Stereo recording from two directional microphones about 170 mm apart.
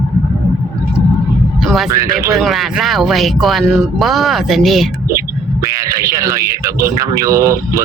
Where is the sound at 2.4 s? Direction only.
Centre (ahead or behind).